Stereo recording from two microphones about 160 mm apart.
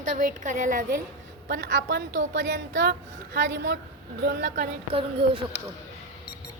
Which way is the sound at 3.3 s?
90° right.